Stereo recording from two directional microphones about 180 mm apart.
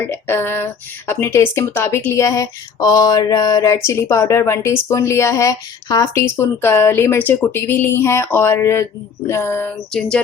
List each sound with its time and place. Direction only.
0.0 s speech: 10° left (ahead or behind)